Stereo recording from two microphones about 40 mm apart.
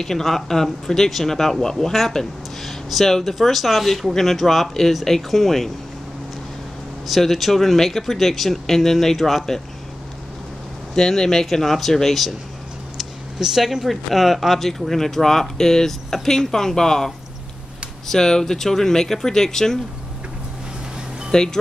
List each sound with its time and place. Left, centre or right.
0.0 s speech: centre
7.1 s speech: centre
11.0 s speech: centre
21.3 s speech: centre